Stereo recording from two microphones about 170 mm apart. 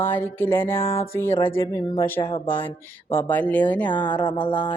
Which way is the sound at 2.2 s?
30° left (ahead or behind).